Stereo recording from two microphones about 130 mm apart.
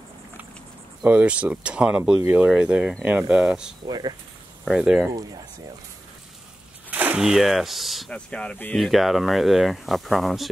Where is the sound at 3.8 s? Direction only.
35° right (ahead or behind).